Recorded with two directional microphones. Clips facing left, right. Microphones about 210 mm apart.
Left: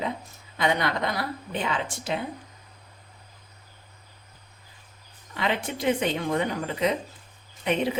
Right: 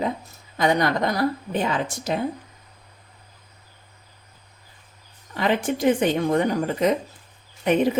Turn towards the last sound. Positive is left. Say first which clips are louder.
# right 6 dB
turn(degrees=-45)  # may be behind; listen again after turning